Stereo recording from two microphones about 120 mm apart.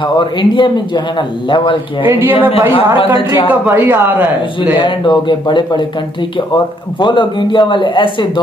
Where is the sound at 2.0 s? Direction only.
15° right (ahead or behind).